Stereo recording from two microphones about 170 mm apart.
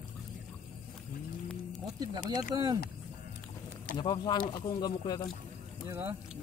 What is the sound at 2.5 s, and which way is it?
Speech, 30° right (ahead or behind).